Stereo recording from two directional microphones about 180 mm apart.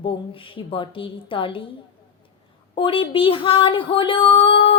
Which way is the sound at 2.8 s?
30° left (ahead or behind).